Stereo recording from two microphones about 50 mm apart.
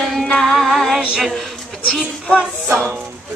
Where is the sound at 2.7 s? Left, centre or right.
Right.